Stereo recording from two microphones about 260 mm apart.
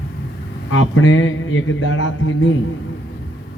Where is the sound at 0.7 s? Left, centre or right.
Left.